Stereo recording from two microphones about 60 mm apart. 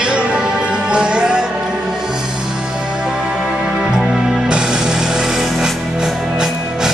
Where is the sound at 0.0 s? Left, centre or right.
Centre.